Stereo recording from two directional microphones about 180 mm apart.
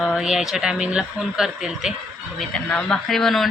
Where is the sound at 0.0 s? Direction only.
Centre (ahead or behind).